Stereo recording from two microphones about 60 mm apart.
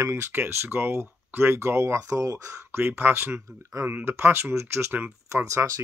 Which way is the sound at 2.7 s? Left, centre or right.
Right.